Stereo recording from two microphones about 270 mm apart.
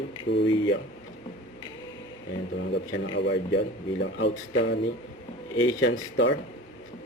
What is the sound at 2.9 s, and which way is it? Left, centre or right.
Speech, left.